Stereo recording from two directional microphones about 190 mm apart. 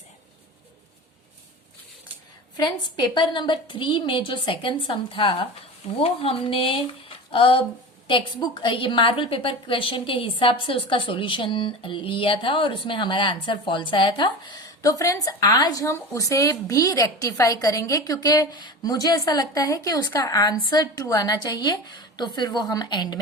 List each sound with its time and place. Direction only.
2.6 s a woman's voice: 20° left (ahead or behind)